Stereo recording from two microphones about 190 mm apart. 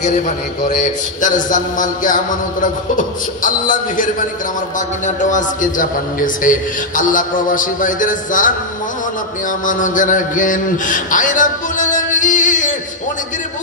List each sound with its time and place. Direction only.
0.7 s a man's voice: 45° left (ahead or behind)
9.7 s a man's voice: 45° left (ahead or behind)